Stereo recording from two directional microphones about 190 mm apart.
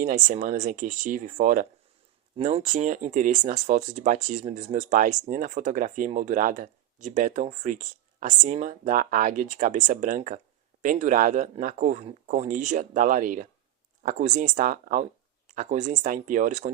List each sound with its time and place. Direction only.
0.0 s speech: 40° right (ahead or behind)